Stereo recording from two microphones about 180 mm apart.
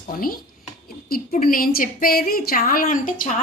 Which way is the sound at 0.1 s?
55° left (ahead or behind).